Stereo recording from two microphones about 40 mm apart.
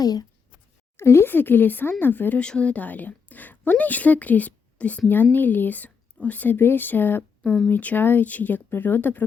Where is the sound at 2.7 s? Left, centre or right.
Left.